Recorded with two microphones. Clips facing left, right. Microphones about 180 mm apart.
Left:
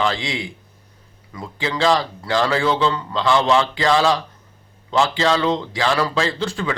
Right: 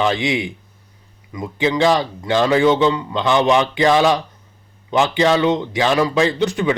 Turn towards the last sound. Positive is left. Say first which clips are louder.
# right 5 dB
turn(degrees=-20)  # may be behind; listen again after turning